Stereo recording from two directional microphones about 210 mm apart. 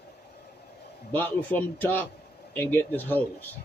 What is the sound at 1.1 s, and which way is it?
A man's voice, 10° left (ahead or behind).